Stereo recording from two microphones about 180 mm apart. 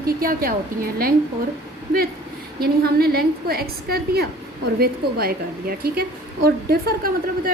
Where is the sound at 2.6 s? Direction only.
60° right (ahead or behind).